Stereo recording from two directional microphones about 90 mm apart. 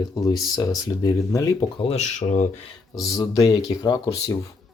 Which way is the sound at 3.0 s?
40° left (ahead or behind).